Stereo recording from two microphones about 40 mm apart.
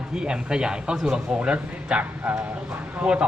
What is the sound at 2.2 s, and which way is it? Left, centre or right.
Speech, right.